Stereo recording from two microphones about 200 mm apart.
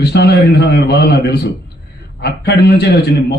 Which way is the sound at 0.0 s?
55° left (ahead or behind).